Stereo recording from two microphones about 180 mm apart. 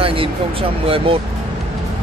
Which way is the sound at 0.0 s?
30° right (ahead or behind).